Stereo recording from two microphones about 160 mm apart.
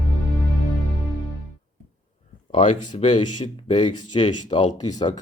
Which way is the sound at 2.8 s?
30° left (ahead or behind).